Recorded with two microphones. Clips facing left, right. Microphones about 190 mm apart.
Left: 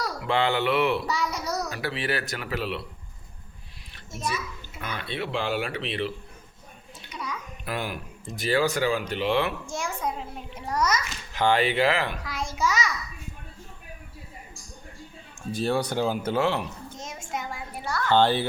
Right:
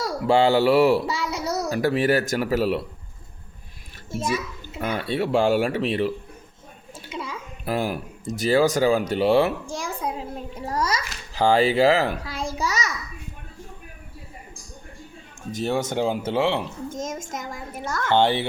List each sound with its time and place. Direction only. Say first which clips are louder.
0.3 s speech: right 7 dB; 40° right (ahead or behind)
1.0 s babbling: right 2 dB; 25° right (ahead or behind)
1.7 s speech: right 9 dB; 45° right (ahead or behind)
4.8 s speech: right 8 dB; 45° right (ahead or behind)
7.1 s babbling: right 3 dB; 25° right (ahead or behind)
8.4 s a woman's voice: right 5 dB; 40° right (ahead or behind)
10.8 s babbling: even; 30° right (ahead or behind)
15.5 s speech: right 1 dB; 20° right (ahead or behind)
16.9 s speech: right 4 dB; 45° right (ahead or behind)
18.0 s speech: right 1 dB; 20° right (ahead or behind)